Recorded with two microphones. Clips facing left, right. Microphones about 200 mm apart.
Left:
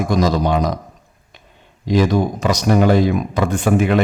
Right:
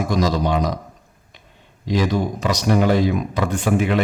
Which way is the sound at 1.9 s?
50° left (ahead or behind).